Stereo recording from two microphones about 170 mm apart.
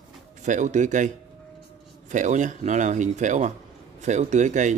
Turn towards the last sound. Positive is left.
turn(degrees=-45)  # may be behind; listen again after turning